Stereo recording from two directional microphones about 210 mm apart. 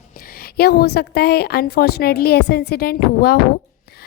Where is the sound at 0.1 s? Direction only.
45° left (ahead or behind).